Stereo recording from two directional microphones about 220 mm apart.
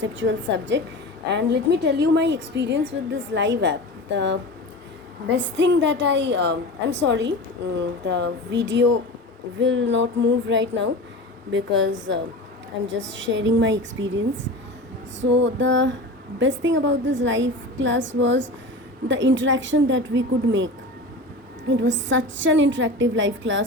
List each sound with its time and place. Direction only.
0.0 s a woman's voice: 55° right (ahead or behind)
5.5 s a woman's voice: 55° right (ahead or behind)
15.2 s a woman's voice: 55° right (ahead or behind)
21.7 s a woman's voice: 55° right (ahead or behind)